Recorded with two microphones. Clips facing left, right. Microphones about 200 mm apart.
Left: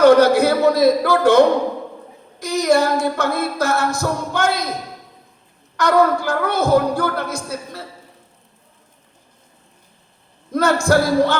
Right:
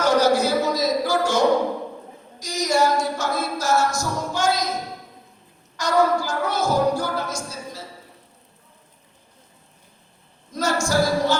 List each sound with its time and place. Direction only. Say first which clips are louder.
0.0 s a capella: left 7 dB; 60° left (ahead or behind)
5.7 s a capella: left 4 dB; 60° left (ahead or behind)
10.5 s a capella: left 6 dB; 60° left (ahead or behind)